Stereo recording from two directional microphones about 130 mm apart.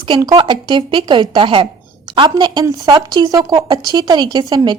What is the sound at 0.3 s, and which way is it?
A woman's voice, 35° right (ahead or behind).